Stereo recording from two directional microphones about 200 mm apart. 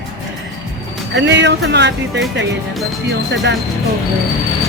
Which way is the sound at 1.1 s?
60° right (ahead or behind).